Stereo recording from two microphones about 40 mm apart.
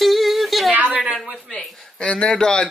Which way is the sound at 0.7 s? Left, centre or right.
Right.